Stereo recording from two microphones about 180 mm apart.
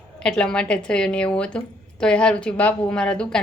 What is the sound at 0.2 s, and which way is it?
Speech, 5° left (ahead or behind).